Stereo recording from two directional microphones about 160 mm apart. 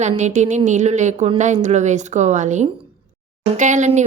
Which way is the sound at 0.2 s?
45° right (ahead or behind).